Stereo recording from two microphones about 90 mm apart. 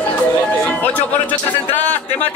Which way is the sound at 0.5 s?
15° left (ahead or behind).